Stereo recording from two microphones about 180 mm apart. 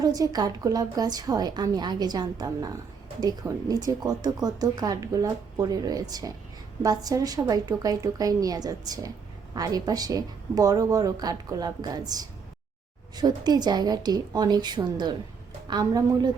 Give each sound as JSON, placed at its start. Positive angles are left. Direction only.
{"t": 0.0, "sound": "speech", "side_deg": -20}